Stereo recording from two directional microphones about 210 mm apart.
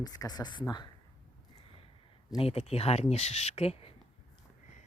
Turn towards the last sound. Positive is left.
turn(degrees=30)  # may be behind; listen again after turning